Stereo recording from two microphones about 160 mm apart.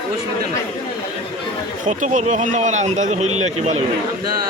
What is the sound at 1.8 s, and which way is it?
A man's voice, 50° right (ahead or behind).